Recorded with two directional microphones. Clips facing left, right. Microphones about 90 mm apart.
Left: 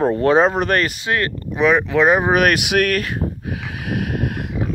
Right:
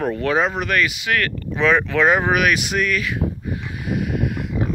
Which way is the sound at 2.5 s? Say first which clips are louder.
Left 3 dB; 65° left (ahead or behind).